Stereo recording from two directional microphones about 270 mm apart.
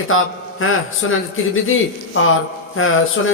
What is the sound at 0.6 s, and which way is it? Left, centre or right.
Speech, left.